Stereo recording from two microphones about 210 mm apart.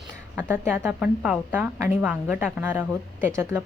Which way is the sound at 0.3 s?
10° right (ahead or behind).